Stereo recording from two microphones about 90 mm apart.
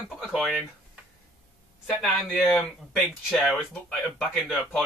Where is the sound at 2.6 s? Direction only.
20° left (ahead or behind).